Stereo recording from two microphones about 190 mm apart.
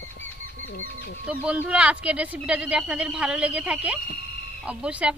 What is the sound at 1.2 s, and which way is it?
Speech, 5° right (ahead or behind).